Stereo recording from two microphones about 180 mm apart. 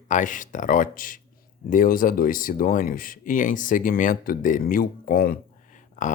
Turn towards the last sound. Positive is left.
turn(degrees=45)  # may be behind; listen again after turning